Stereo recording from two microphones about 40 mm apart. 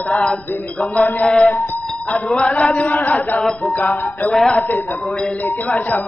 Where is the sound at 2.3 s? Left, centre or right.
Left.